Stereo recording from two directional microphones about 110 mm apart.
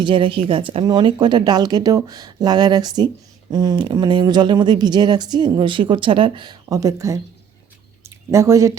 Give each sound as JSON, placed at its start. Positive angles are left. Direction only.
{"t": 0.0, "sound": "speech", "side_deg": -50}
{"t": 0.9, "sound": "speech", "side_deg": -40}
{"t": 8.0, "sound": "a sound", "side_deg": -25}